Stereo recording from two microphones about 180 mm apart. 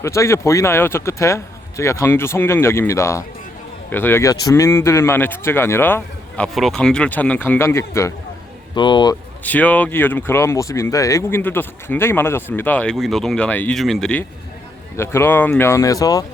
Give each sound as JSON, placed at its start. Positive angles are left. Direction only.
{"t": 0.0, "sound": "speech", "side_deg": 15}
{"t": 8.7, "sound": "speech", "side_deg": 25}
{"t": 9.4, "sound": "speech", "side_deg": 10}